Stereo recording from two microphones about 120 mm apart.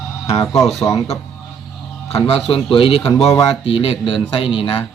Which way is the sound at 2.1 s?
50° left (ahead or behind).